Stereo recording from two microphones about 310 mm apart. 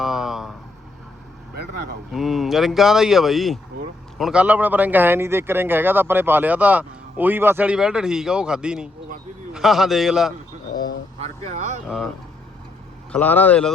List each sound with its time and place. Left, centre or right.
0.0 s vehicle: centre
2.1 s speech: centre
11.2 s speech: right
13.1 s speech: centre